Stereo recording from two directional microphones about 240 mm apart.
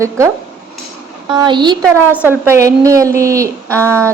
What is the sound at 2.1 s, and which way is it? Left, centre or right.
A woman's voice, centre.